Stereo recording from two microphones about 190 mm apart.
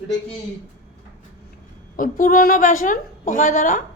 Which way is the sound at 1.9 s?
45° left (ahead or behind).